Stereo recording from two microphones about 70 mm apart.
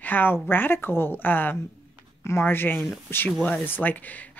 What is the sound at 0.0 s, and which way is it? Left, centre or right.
Speech, left.